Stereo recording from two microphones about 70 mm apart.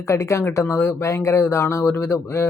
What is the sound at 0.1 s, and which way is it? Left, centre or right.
Speech, left.